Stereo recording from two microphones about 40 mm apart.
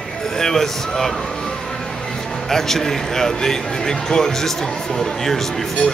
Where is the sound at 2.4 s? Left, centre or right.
Centre.